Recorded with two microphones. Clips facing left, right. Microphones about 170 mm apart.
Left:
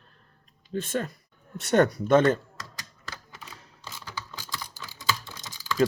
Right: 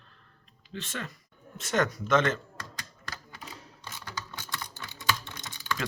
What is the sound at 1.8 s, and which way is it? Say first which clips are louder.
Speech: left 3 dB; 35° left (ahead or behind).